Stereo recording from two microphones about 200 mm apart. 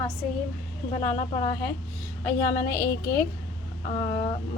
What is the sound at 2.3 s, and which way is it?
Speech, 10° left (ahead or behind).